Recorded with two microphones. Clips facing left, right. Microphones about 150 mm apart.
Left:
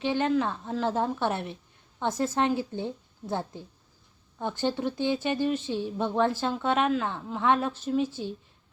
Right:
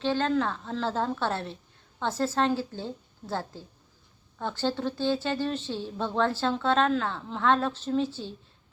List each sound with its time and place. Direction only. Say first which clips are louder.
0.0 s a woman's voice: even; 15° left (ahead or behind)